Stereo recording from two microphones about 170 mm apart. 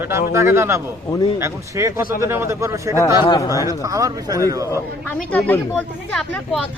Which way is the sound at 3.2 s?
25° left (ahead or behind).